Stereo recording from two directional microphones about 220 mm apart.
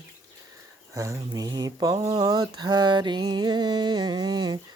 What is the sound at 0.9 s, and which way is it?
Speech, 15° right (ahead or behind).